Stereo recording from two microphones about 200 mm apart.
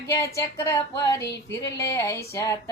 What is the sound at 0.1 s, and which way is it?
Speech, 15° left (ahead or behind).